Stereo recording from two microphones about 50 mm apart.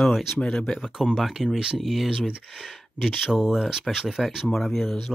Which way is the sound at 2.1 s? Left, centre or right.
Centre.